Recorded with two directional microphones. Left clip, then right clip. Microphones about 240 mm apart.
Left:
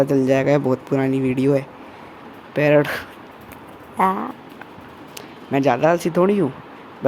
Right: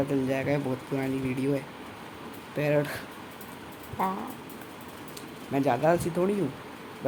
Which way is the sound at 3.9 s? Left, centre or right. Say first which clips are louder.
Left 11 dB; left.